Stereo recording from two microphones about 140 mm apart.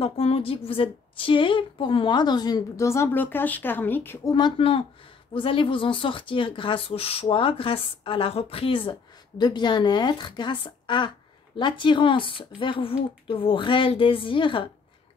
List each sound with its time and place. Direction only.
0.0 s a woman's voice: 45° left (ahead or behind)